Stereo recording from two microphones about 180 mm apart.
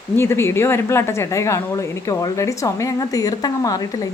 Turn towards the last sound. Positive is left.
turn(degrees=20)  # may be behind; listen again after turning